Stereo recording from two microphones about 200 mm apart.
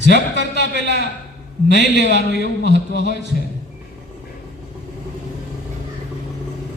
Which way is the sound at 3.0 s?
60° right (ahead or behind).